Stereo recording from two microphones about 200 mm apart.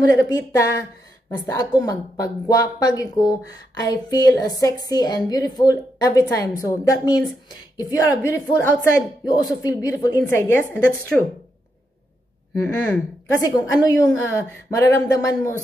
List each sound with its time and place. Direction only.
0.2 s speech: 15° left (ahead or behind)
12.6 s speech: 15° left (ahead or behind)